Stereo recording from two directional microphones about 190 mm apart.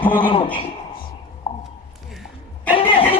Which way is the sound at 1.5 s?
35° left (ahead or behind).